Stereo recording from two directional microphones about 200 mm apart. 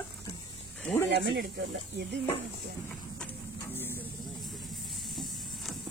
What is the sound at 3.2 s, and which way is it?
Printer, 10° left (ahead or behind).